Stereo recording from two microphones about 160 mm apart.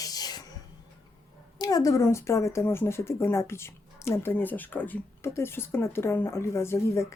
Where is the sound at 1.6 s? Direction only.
20° left (ahead or behind).